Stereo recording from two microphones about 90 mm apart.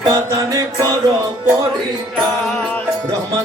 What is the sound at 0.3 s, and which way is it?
Music, 35° right (ahead or behind).